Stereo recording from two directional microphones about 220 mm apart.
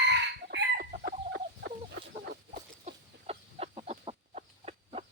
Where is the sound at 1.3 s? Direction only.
50° right (ahead or behind).